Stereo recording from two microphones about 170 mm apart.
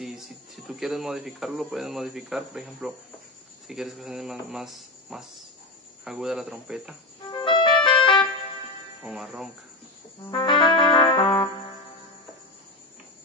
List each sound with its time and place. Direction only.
0.0 s speech: centre (ahead or behind)
7.2 s music: 30° left (ahead or behind)
9.0 s speech: 5° right (ahead or behind)
10.3 s music: 30° left (ahead or behind)